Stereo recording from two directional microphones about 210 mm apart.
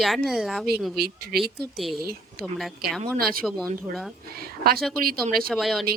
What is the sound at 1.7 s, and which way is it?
Speech, centre (ahead or behind).